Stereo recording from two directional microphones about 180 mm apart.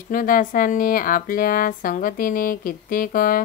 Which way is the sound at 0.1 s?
50° left (ahead or behind).